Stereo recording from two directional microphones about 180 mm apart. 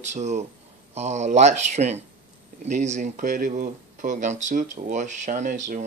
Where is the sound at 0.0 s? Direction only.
40° right (ahead or behind).